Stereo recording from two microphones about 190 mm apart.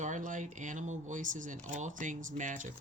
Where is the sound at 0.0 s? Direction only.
40° right (ahead or behind).